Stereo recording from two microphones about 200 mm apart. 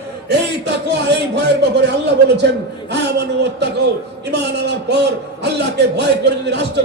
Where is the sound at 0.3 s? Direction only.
60° right (ahead or behind).